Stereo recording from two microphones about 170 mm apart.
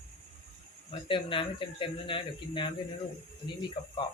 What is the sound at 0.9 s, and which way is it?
Speech, 30° left (ahead or behind).